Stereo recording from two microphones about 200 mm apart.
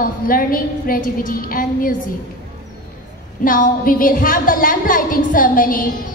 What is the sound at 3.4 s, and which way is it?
A woman's voice, 45° left (ahead or behind).